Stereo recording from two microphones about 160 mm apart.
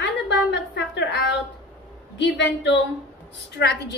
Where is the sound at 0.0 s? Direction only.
90° left.